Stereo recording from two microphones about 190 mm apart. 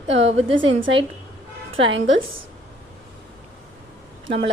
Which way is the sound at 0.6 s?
80° right.